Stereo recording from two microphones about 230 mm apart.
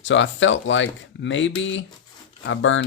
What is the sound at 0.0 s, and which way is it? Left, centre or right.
Speech, left.